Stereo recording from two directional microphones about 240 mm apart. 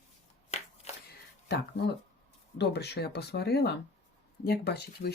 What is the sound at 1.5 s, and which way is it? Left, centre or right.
Speech, left.